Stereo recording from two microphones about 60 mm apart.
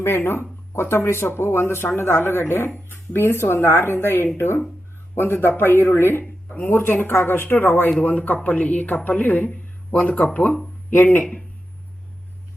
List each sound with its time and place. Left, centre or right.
0.0 s speech: left
7.9 s a man's voice: left
10.9 s speech: left